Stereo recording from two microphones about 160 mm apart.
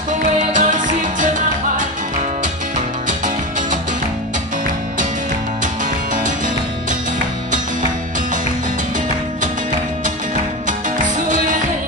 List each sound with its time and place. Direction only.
0.1 s music: 50° right (ahead or behind)
3.1 s music: 55° right (ahead or behind)
6.1 s music: 55° right (ahead or behind)
11.1 s music: 55° right (ahead or behind)